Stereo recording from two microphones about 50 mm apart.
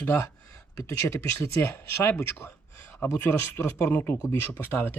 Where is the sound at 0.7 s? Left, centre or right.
Left.